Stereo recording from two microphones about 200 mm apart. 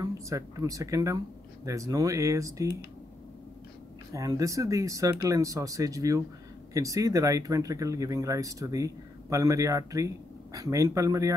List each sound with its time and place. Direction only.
0.0 s speech: 15° right (ahead or behind)
4.1 s speech: 15° right (ahead or behind)